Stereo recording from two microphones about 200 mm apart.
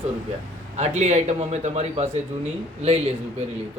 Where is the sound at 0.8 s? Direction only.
35° right (ahead or behind).